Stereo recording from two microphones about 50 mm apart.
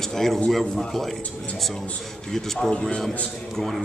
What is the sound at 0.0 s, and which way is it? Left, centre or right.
A man's voice, centre.